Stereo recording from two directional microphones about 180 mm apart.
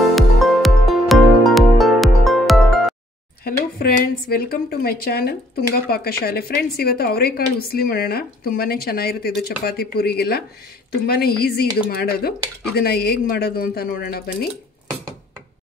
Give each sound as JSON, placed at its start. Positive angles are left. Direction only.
{"t": 0.0, "sound": "music", "side_deg": 0}
{"t": 3.4, "sound": "a woman's voice", "side_deg": 55}